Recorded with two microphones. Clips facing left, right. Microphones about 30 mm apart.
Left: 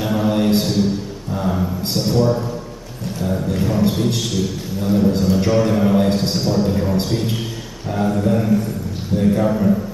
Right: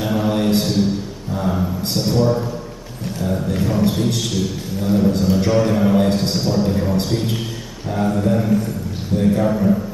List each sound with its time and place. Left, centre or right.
0.0 s mantra: centre
3.2 s a man's voice: centre